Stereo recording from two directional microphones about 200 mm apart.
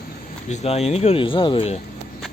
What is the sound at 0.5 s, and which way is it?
Speech, 30° left (ahead or behind).